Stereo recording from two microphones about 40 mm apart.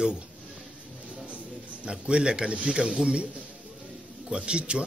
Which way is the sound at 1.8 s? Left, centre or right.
Right.